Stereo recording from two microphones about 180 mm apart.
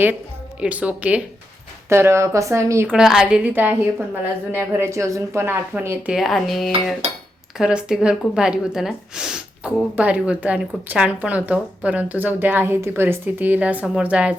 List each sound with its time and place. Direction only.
0.6 s speech: 10° right (ahead or behind)
2.9 s a woman's voice: centre (ahead or behind)
6.1 s a woman's voice: centre (ahead or behind)